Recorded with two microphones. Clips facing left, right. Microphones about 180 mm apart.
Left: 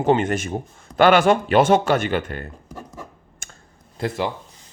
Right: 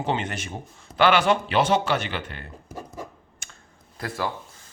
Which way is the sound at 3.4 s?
45° left (ahead or behind).